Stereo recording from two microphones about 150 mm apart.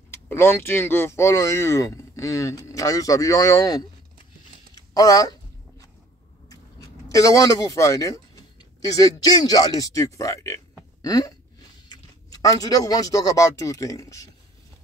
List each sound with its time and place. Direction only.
0.1 s speech: 15° left (ahead or behind)
4.9 s a sound: 25° left (ahead or behind)
6.5 s speech: 25° left (ahead or behind)